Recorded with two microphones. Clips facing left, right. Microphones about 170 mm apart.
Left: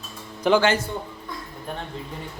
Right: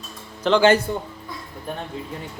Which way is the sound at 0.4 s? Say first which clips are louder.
Even; 10° left (ahead or behind).